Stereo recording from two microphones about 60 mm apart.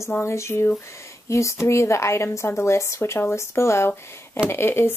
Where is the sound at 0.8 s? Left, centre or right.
Left.